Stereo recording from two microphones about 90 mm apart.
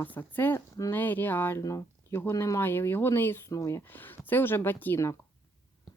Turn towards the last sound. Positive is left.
turn(degrees=25)  # may be behind; listen again after turning